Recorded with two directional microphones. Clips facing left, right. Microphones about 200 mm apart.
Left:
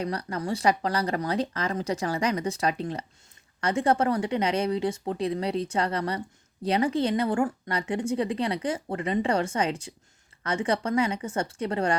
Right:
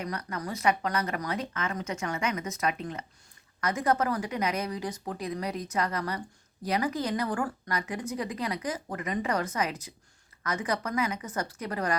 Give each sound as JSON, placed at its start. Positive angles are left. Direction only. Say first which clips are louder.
{"t": 0.0, "sound": "speech", "louder": "left 5 dB", "side_deg": 30}